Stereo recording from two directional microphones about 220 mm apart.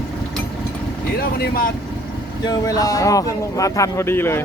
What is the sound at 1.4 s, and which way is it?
Speech, 40° left (ahead or behind).